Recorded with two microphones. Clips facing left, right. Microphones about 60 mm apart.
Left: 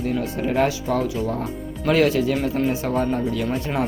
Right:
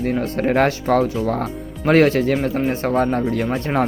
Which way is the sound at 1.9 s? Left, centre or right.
Right.